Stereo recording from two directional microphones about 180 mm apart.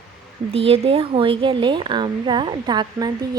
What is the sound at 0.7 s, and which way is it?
A woman's voice, 30° right (ahead or behind).